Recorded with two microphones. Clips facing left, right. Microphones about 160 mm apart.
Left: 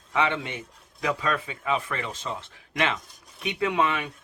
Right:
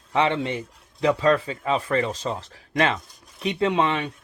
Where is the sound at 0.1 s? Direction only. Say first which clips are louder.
Right 4 dB; 35° right (ahead or behind).